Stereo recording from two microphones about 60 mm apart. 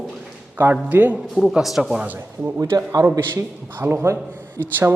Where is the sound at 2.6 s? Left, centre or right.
Right.